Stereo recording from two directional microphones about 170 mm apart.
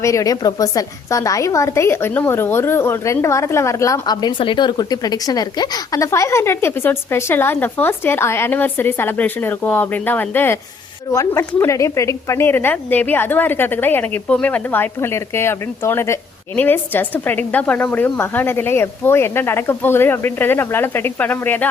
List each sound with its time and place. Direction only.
0.0 s a woman's voice: 20° left (ahead or behind)